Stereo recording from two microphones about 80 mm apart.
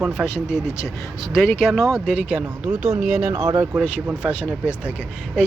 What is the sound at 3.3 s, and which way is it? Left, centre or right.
Speech, right.